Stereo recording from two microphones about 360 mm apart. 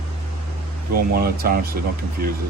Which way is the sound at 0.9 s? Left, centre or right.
Right.